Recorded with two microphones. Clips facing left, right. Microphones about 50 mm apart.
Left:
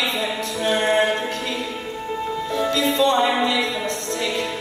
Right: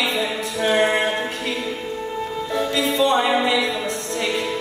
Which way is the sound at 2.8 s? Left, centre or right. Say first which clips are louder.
Even; centre.